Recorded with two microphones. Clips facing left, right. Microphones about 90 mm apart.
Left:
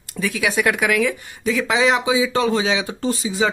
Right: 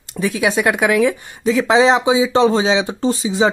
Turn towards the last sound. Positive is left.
turn(degrees=-25)  # may be behind; listen again after turning